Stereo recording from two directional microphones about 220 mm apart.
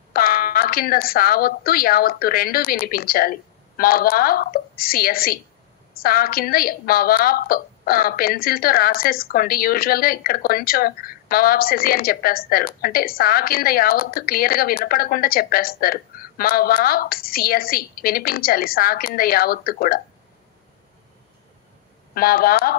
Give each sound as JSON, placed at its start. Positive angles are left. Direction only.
{"t": 0.1, "sound": "a woman's voice", "side_deg": 40}
{"t": 22.1, "sound": "a woman's voice", "side_deg": 40}